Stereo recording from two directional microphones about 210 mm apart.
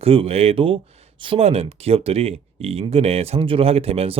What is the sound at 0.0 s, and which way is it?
Speech, 25° right (ahead or behind).